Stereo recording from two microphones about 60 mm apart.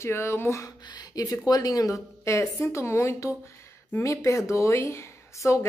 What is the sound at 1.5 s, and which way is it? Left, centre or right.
A woman's voice, left.